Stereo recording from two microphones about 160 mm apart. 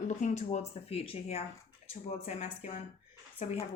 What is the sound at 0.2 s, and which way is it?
Speech, 45° left (ahead or behind).